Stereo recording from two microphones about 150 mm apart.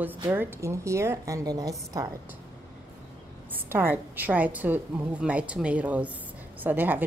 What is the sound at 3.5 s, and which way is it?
A woman's voice, 15° right (ahead or behind).